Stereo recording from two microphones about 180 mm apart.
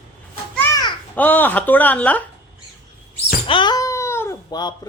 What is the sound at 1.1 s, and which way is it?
Speech, 10° left (ahead or behind).